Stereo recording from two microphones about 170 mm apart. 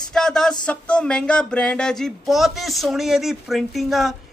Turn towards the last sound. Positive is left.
turn(degrees=0)  # may be behind; listen again after turning